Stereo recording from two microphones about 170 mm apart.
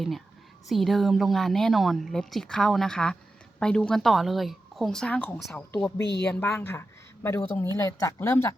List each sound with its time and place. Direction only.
0.7 s speech: centre (ahead or behind)
6.0 s speech: 85° left
6.2 s speech: 10° left (ahead or behind)